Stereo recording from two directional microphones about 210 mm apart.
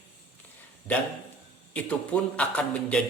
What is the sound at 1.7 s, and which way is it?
A man's voice, 5° left (ahead or behind).